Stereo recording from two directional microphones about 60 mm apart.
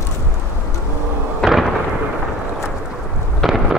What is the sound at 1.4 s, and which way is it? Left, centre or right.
Fireworks, centre.